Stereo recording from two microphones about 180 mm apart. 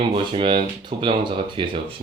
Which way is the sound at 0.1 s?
30° right (ahead or behind).